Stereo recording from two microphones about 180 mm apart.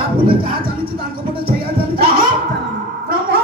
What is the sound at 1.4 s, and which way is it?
Music, 60° right (ahead or behind).